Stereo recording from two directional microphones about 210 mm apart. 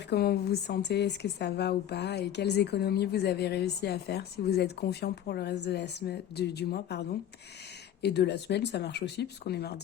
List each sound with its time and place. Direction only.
0.1 s speech: 50° left (ahead or behind)